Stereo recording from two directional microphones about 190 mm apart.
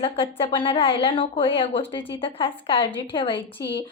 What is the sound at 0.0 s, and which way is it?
A woman's voice, 30° left (ahead or behind).